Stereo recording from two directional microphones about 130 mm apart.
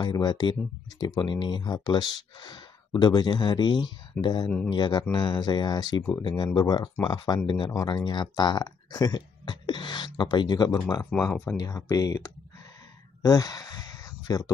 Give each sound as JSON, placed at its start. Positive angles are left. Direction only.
{"t": 0.0, "sound": "speech", "side_deg": 35}
{"t": 11.2, "sound": "speech", "side_deg": 10}
{"t": 11.5, "sound": "speech", "side_deg": 25}